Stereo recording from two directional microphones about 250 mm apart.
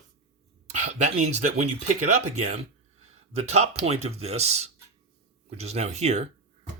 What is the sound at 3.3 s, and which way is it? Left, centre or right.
Speech, right.